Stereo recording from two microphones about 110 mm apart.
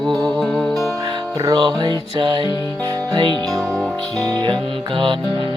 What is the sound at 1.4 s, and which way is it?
Music, 40° right (ahead or behind).